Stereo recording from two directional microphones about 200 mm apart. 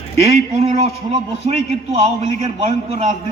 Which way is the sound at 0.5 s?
35° right (ahead or behind).